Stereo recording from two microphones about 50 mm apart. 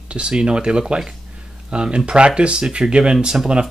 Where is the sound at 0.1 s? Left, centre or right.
Centre.